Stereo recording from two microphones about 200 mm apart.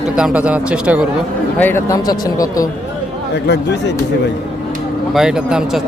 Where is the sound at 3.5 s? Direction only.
60° left (ahead or behind).